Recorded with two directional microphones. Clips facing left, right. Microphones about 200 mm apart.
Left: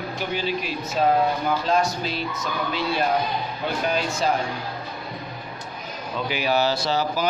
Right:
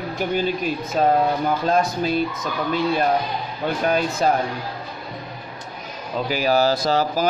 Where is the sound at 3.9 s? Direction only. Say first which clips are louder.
Right 4 dB; 55° right (ahead or behind).